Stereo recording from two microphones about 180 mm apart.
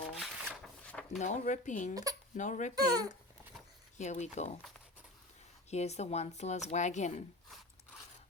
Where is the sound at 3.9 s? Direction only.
40° left (ahead or behind).